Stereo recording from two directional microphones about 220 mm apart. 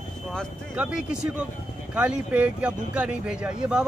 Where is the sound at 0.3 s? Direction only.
Centre (ahead or behind).